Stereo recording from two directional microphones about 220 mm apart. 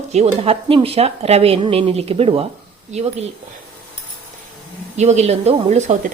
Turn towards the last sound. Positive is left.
turn(degrees=-30)  # may be behind; listen again after turning